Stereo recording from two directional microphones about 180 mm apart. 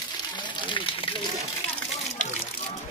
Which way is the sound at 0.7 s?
30° left (ahead or behind).